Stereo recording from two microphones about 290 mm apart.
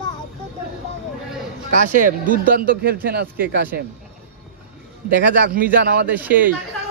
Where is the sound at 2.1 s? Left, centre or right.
Right.